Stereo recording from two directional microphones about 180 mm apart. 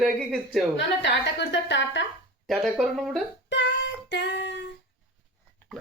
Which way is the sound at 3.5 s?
85° left.